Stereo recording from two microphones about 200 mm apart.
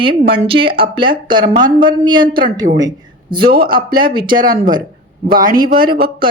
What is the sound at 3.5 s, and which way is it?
Speech, 45° right (ahead or behind).